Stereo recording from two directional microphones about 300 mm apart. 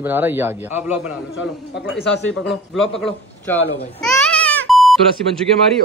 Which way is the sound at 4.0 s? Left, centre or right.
Centre.